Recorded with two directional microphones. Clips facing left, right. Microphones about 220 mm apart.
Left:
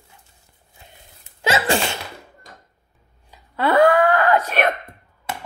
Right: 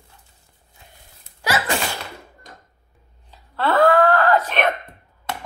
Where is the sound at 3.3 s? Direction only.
15° left (ahead or behind).